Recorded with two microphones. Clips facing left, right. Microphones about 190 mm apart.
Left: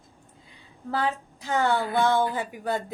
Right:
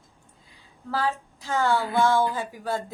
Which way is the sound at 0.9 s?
20° left (ahead or behind).